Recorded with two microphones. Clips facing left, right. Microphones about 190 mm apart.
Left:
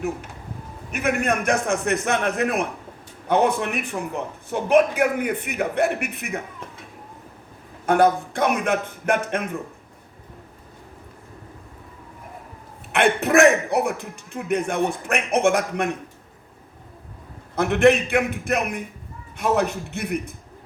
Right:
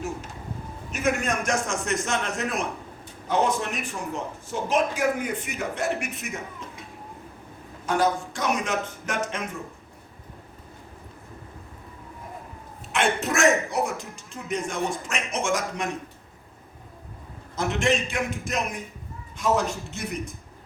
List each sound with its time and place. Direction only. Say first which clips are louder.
0.9 s a man's voice: left 3 dB; 60° left (ahead or behind)
7.9 s a man's voice: left 6 dB; 60° left (ahead or behind)
12.9 s a man's voice: left 6 dB; 60° left (ahead or behind)
17.5 s a man's voice: left 8 dB; 60° left (ahead or behind)